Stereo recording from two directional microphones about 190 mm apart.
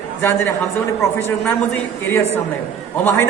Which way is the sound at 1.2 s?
15° left (ahead or behind).